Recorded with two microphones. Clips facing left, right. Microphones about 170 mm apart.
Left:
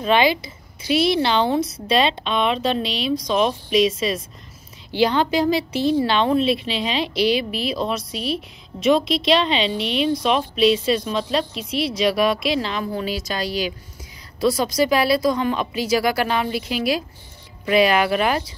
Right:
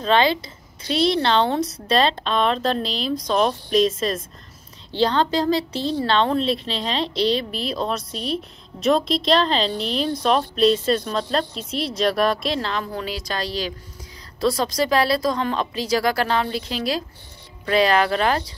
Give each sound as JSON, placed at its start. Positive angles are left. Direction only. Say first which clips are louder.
{"t": 0.0, "sound": "a woman's voice", "louder": "left 1 dB", "side_deg": 10}
{"t": 14.6, "sound": "a woman's voice", "louder": "left 1 dB", "side_deg": 10}